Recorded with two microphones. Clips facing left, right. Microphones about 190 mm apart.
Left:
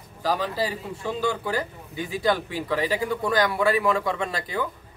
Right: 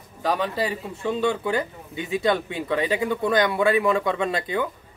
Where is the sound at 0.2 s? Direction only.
25° right (ahead or behind).